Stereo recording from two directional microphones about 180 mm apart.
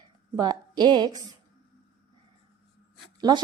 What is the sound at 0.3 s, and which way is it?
Speech, 20° right (ahead or behind).